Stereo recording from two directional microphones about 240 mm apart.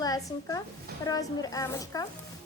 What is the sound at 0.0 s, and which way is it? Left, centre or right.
A woman's voice, centre.